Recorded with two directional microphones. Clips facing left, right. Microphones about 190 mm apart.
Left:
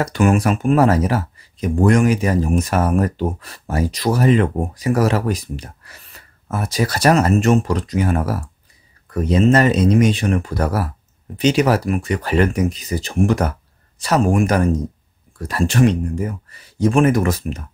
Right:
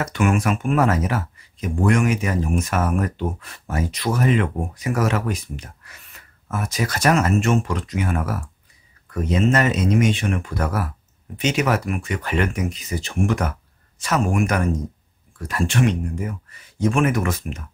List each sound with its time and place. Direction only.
0.0 s speech: 35° left (ahead or behind)